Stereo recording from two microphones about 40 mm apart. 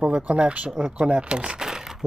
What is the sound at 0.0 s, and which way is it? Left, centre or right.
Speech, right.